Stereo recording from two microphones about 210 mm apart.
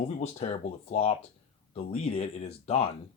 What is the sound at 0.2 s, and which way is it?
Speech, 30° left (ahead or behind).